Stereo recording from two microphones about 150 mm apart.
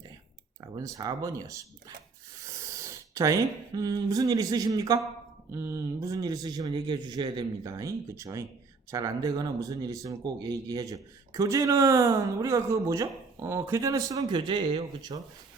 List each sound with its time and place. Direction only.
0.6 s speech: 25° right (ahead or behind)